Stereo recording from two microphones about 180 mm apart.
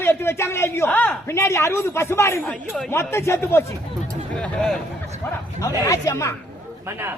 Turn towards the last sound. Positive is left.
turn(degrees=-15)  # may be behind; listen again after turning